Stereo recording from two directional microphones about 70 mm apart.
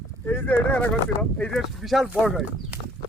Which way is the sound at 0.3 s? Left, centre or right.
Left.